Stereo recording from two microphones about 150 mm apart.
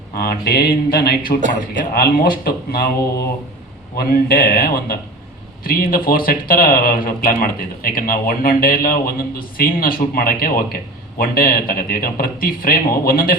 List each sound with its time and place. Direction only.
0.2 s speech: 90° left
1.8 s a man's voice: 70° left (ahead or behind)